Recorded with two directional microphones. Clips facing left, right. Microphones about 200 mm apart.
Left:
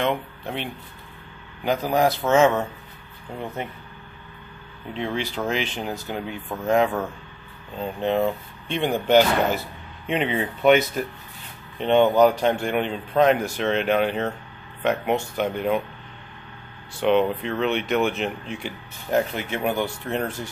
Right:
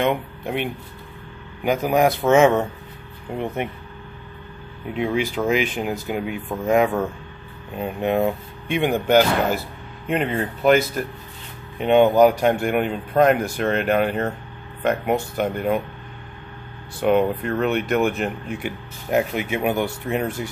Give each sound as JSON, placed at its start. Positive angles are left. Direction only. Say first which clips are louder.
{"t": 0.0, "sound": "speech", "louder": "right 3 dB", "side_deg": -10}
{"t": 4.9, "sound": "speech", "louder": "right 5 dB", "side_deg": -10}
{"t": 15.3, "sound": "speech", "louder": "right 1 dB", "side_deg": 0}
{"t": 17.0, "sound": "speech", "louder": "right 1 dB", "side_deg": -5}